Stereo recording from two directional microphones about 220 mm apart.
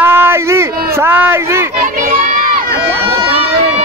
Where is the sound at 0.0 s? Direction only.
10° right (ahead or behind).